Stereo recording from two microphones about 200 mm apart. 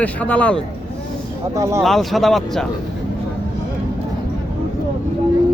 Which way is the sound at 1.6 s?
15° right (ahead or behind).